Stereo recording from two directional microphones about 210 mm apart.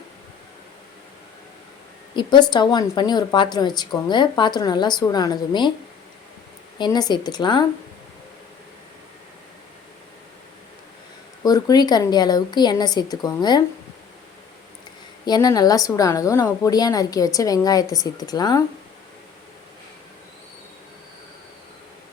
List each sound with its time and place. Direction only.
2.1 s a woman's voice: 20° left (ahead or behind)
6.7 s a woman's voice: 20° left (ahead or behind)
11.4 s a woman's voice: 20° left (ahead or behind)
15.2 s a woman's voice: 20° left (ahead or behind)